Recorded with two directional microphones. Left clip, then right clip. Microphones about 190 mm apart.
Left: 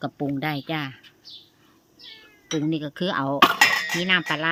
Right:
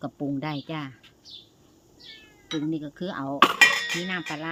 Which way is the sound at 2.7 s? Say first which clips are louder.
Left 6 dB; 40° left (ahead or behind).